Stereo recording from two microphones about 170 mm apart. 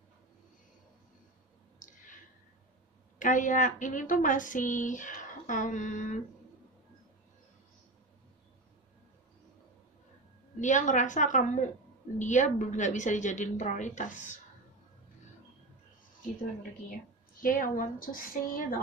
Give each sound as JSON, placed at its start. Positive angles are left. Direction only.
{"t": 1.8, "sound": "a sound", "side_deg": 50}
{"t": 3.2, "sound": "speech", "side_deg": 50}
{"t": 10.6, "sound": "speech", "side_deg": 45}
{"t": 17.4, "sound": "a woman's voice", "side_deg": 50}